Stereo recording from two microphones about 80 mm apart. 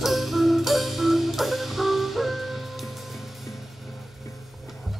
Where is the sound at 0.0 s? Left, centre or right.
Centre.